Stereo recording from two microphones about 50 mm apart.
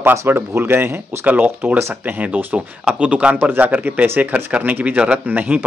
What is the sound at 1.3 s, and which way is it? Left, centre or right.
A man's voice, right.